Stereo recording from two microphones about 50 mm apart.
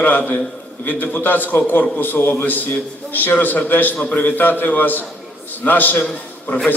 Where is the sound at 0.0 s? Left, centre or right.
Left.